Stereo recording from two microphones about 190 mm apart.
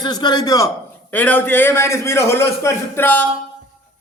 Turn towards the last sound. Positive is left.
turn(degrees=10)  # may be behind; listen again after turning